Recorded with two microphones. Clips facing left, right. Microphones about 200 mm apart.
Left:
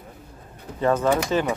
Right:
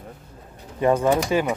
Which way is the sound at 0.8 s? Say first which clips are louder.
Right 2 dB; 15° right (ahead or behind).